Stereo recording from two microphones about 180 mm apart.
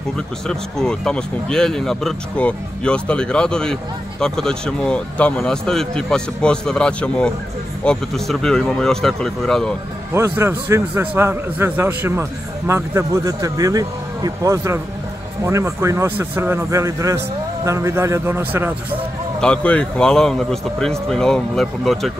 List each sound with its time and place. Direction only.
0.5 s speech: 5° left (ahead or behind)
10.1 s a man's voice: 15° right (ahead or behind)
19.4 s speech: 5° left (ahead or behind)